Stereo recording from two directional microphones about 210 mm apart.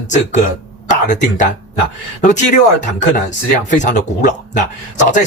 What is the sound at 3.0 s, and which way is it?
Speech, 35° left (ahead or behind).